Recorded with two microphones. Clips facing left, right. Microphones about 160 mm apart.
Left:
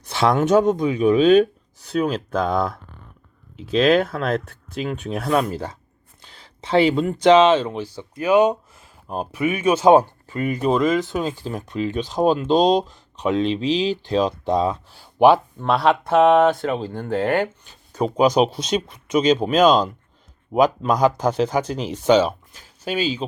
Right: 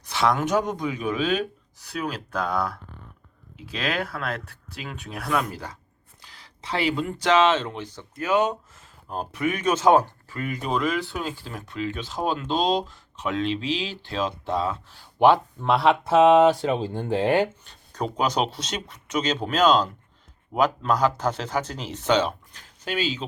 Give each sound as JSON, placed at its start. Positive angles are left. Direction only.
{"t": 0.2, "sound": "speech", "side_deg": 25}
{"t": 10.0, "sound": "speech", "side_deg": 20}
{"t": 16.9, "sound": "speech", "side_deg": -20}
{"t": 17.6, "sound": "speech", "side_deg": 5}